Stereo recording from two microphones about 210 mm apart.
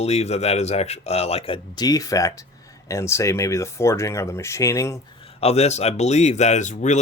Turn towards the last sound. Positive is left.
turn(degrees=35)  # may be behind; listen again after turning